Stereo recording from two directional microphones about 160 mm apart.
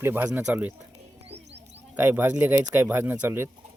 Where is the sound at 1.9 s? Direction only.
15° right (ahead or behind).